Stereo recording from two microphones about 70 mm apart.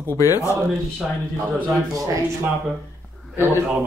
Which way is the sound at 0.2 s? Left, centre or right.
Left.